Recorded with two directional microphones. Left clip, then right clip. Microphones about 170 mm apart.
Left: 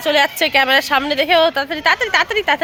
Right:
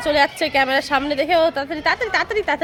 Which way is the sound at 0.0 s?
20° left (ahead or behind).